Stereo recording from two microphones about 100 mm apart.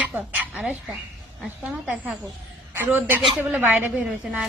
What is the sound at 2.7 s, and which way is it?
A woman's voice, 20° right (ahead or behind).